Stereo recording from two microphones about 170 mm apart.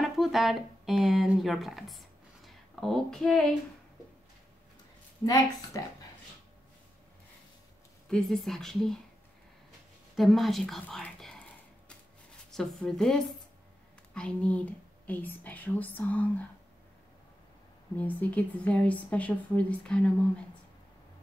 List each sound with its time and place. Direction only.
0.0 s speech: centre (ahead or behind)
5.2 s a woman's voice: 20° left (ahead or behind)
8.1 s a woman's voice: centre (ahead or behind)
10.1 s a woman's voice: centre (ahead or behind)
12.4 s speech: 5° left (ahead or behind)
17.9 s speech: 10° left (ahead or behind)